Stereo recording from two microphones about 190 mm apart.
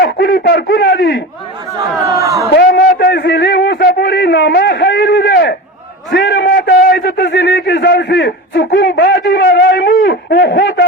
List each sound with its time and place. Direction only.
0.0 s speech: 60° left (ahead or behind)
2.1 s a man's voice: 15° right (ahead or behind)
2.5 s a sound: 55° left (ahead or behind)
6.3 s a man's voice: 65° left (ahead or behind)